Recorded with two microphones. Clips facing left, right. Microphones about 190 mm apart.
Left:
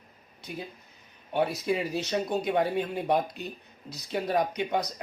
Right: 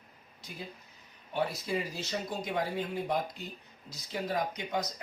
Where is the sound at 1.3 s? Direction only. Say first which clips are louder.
Left 5 dB; 65° left (ahead or behind).